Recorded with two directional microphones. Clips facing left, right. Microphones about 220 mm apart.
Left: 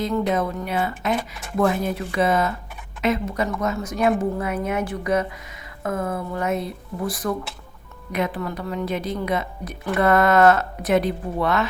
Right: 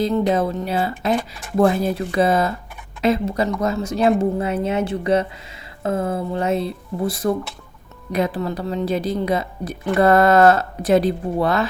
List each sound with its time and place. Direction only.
0.0 s speech: 30° right (ahead or behind)